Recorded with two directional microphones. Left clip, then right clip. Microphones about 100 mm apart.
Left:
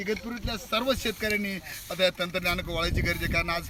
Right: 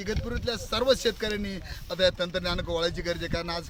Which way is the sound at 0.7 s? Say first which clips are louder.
Right 3 dB; 45° right (ahead or behind).